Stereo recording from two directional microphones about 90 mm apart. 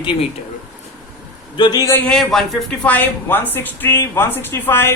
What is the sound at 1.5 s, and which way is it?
Speech, 55° left (ahead or behind).